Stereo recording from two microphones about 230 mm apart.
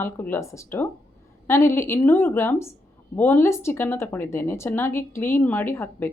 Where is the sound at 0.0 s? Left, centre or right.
Centre.